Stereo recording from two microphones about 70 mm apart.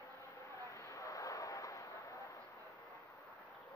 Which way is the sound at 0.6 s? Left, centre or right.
Left.